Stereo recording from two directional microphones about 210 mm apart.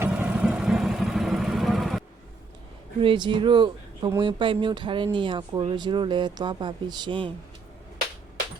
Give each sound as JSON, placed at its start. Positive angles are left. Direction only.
{"t": 0.0, "sound": "vehicle", "side_deg": -10}
{"t": 3.0, "sound": "speech", "side_deg": -25}